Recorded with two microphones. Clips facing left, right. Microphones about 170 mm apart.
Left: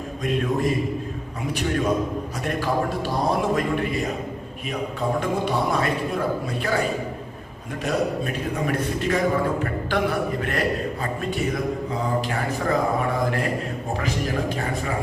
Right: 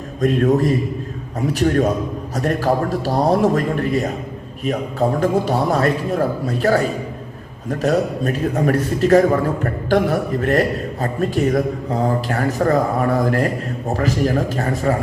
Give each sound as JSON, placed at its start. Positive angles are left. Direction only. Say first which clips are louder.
{"t": 0.2, "sound": "a man's voice", "louder": "right 8 dB", "side_deg": -40}